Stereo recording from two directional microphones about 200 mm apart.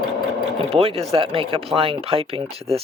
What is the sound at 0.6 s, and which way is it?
Speech, 30° right (ahead or behind).